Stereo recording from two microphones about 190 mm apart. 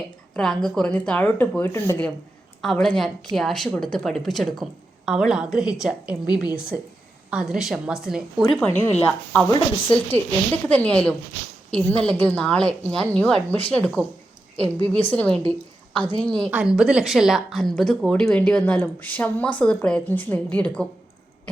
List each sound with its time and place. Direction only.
0.3 s speech: centre (ahead or behind)
6.2 s a woman's voice: 20° left (ahead or behind)
7.3 s a woman's voice: 5° right (ahead or behind)
15.1 s a woman's voice: 5° left (ahead or behind)